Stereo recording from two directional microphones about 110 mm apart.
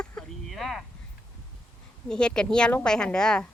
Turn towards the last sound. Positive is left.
turn(degrees=5)  # may be behind; listen again after turning